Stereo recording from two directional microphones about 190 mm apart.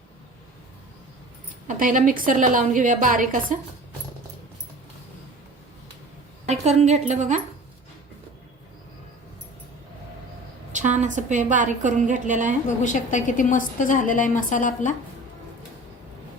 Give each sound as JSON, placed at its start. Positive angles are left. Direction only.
{"t": 1.6, "sound": "a woman's voice", "side_deg": -40}
{"t": 6.5, "sound": "a woman's voice", "side_deg": -35}
{"t": 10.7, "sound": "a woman's voice", "side_deg": -40}
{"t": 12.6, "sound": "a woman's voice", "side_deg": 40}